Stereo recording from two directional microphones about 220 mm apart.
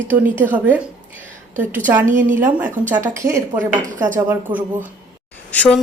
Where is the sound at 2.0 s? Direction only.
35° right (ahead or behind).